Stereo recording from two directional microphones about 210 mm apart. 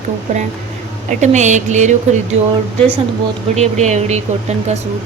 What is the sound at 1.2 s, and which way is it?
Speech, 35° right (ahead or behind).